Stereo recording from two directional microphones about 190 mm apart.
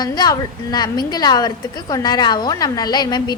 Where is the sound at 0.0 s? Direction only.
20° left (ahead or behind).